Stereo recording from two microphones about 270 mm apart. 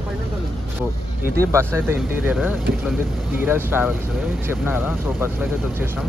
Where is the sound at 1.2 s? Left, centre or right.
Centre.